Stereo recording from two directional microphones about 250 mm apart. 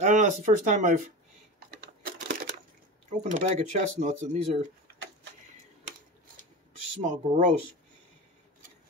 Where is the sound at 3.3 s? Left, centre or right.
Right.